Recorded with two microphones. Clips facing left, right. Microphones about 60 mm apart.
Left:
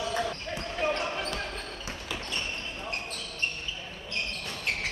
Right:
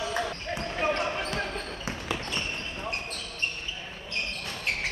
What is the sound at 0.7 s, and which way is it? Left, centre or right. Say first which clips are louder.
Basketball bounce: right 1 dB; right.